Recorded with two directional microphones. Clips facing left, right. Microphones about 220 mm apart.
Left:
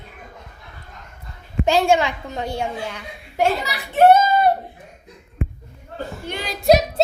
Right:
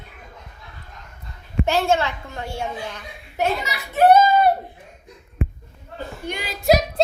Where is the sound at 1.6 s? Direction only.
15° left (ahead or behind).